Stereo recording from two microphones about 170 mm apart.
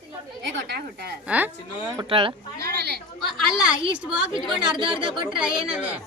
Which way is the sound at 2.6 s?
70° right (ahead or behind).